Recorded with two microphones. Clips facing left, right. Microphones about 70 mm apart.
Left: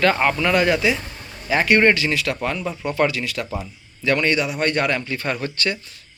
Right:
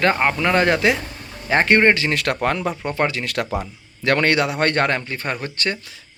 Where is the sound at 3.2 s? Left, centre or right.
Right.